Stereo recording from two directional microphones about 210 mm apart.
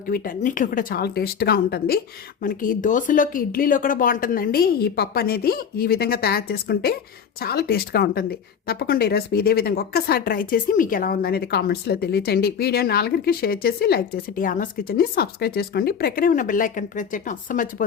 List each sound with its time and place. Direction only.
0.1 s speech: 40° left (ahead or behind)